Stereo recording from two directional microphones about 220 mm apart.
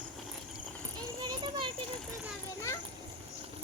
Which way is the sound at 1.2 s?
20° right (ahead or behind).